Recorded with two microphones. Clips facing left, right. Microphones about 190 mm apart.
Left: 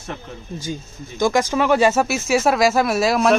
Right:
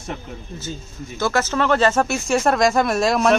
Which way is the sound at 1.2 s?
15° left (ahead or behind).